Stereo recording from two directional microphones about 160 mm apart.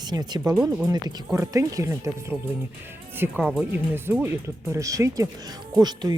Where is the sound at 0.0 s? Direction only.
25° right (ahead or behind).